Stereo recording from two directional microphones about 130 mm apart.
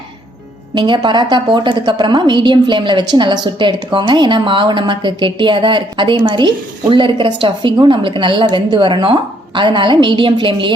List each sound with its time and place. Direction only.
0.7 s a woman's voice: 35° right (ahead or behind)